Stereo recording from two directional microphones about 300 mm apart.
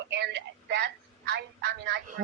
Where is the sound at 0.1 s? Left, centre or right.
Right.